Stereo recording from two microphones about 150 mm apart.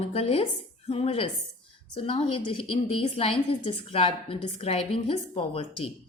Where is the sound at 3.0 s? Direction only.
40° left (ahead or behind).